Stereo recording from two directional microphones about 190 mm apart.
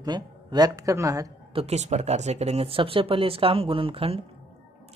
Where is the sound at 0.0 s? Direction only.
20° right (ahead or behind).